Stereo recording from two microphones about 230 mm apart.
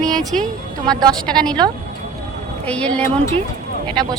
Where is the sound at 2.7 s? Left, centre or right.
Centre.